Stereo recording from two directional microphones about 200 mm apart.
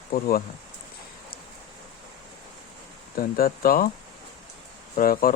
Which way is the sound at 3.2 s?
45° left (ahead or behind).